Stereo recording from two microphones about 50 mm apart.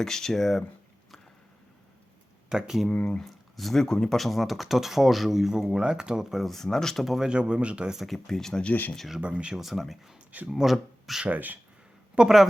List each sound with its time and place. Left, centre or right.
0.0 s speech: centre
2.5 s speech: centre
2.9 s speech: centre
3.2 s speech: centre
6.4 s speech: centre
7.0 s speech: centre
7.3 s speech: centre
7.9 s speech: centre
8.6 s speech: left
9.2 s speech: right
9.6 s speech: centre
12.2 s speech: right